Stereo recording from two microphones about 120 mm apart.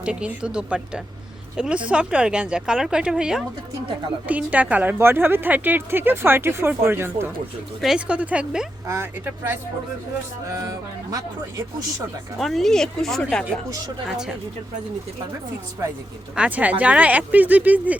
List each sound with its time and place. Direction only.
0.0 s a woman's voice: 10° right (ahead or behind)
7.8 s a woman's voice: 5° right (ahead or behind)
8.9 s speech: 20° right (ahead or behind)
12.4 s speech: centre (ahead or behind)
16.3 s a woman's voice: 10° right (ahead or behind)